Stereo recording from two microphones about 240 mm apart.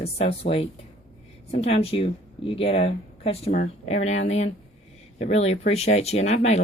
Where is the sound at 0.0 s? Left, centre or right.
Left.